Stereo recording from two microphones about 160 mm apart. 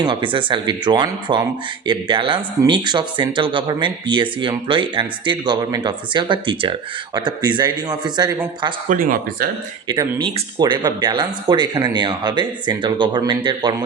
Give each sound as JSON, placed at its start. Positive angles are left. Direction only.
{"t": 0.0, "sound": "speech", "side_deg": -30}
{"t": 8.9, "sound": "speech", "side_deg": -60}
{"t": 9.9, "sound": "speech", "side_deg": -30}